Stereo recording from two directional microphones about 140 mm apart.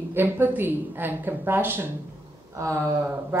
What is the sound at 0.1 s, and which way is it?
Speech, 15° right (ahead or behind).